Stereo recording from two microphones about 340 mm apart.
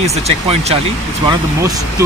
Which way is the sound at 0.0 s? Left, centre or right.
Centre.